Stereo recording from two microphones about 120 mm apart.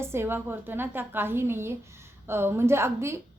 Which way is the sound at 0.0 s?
20° right (ahead or behind).